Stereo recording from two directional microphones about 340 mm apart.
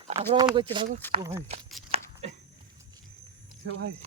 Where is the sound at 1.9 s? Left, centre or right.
Centre.